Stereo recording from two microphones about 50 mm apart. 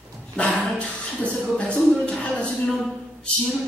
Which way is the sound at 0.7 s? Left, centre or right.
Centre.